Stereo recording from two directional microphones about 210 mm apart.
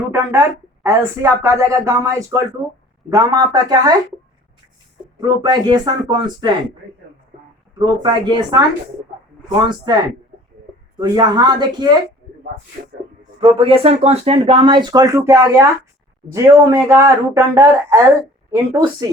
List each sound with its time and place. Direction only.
0.1 s speech: 10° right (ahead or behind)
5.2 s speech: 20° right (ahead or behind)
7.8 s speech: 20° right (ahead or behind)
9.6 s speech: 20° right (ahead or behind)
11.0 s speech: 20° right (ahead or behind)
13.4 s speech: 25° right (ahead or behind)